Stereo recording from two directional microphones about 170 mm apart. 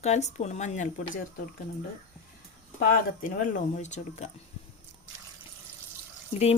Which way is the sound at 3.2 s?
50° left (ahead or behind).